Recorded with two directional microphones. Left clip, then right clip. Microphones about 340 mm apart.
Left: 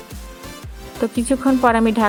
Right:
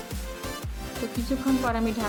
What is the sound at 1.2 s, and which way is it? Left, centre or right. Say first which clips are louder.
Speech: left 11 dB; left.